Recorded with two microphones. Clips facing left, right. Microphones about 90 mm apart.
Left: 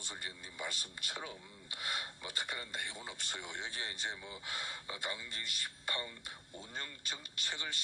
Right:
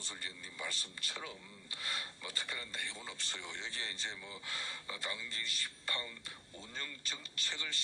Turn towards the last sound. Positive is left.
turn(degrees=15)  # may be behind; listen again after turning